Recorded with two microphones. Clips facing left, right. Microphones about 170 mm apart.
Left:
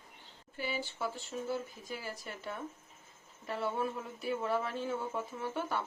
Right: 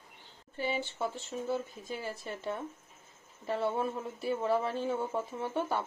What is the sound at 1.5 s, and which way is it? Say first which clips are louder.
Speech: right 5 dB; 25° right (ahead or behind).